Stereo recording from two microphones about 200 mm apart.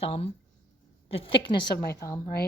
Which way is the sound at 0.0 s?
30° left (ahead or behind).